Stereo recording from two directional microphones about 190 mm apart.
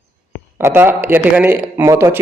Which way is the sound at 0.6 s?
10° right (ahead or behind).